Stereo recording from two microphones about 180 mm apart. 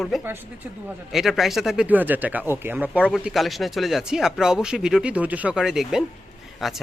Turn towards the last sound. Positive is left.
turn(degrees=0)  # may be behind; listen again after turning